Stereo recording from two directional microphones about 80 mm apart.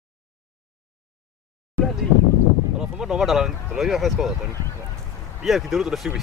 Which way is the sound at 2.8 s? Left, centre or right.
Centre.